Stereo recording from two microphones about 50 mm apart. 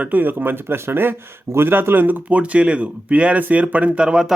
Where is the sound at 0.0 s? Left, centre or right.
Right.